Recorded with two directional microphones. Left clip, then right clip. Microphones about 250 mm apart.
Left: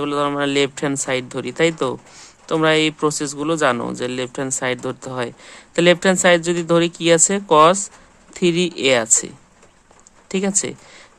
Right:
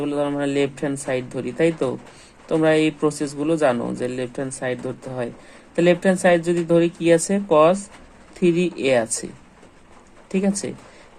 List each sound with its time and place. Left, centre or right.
0.0 s speech: centre